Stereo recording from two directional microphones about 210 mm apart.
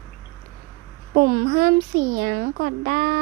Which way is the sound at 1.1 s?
50° right (ahead or behind).